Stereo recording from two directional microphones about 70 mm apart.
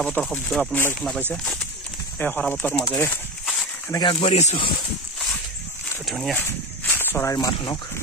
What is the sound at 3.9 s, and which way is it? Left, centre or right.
Speech, left.